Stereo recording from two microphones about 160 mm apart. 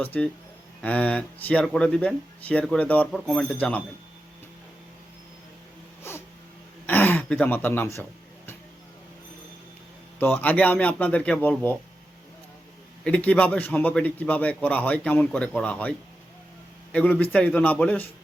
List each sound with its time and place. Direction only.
0.0 s speech: 10° left (ahead or behind)
6.0 s a sound: 15° left (ahead or behind)
6.8 s speech: 10° left (ahead or behind)
10.2 s speech: 10° left (ahead or behind)
13.1 s speech: 10° left (ahead or behind)